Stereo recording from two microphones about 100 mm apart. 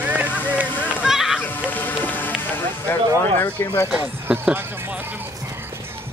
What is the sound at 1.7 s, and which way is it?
Speech, 15° left (ahead or behind).